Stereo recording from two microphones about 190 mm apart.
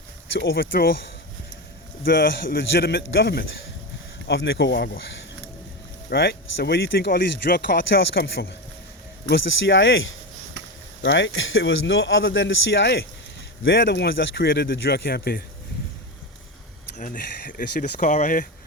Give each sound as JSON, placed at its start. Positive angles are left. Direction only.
{"t": 0.4, "sound": "speech", "side_deg": 55}
{"t": 6.1, "sound": "speech", "side_deg": 60}
{"t": 9.3, "sound": "speech", "side_deg": 75}
{"t": 11.0, "sound": "speech", "side_deg": 70}
{"t": 17.0, "sound": "speech", "side_deg": 45}